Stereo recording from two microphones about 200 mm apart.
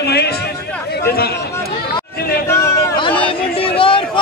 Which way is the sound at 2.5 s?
15° left (ahead or behind).